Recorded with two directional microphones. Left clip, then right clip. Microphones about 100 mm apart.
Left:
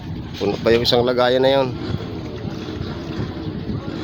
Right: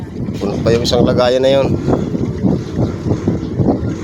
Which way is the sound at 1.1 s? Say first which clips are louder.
Right 6 dB; 5° left (ahead or behind).